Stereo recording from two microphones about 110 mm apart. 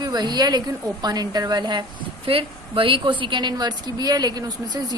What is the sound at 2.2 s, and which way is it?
A woman's voice, 50° right (ahead or behind).